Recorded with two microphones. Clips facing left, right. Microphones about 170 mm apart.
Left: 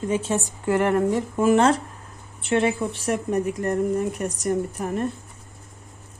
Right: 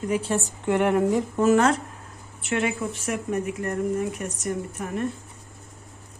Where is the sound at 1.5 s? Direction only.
30° left (ahead or behind).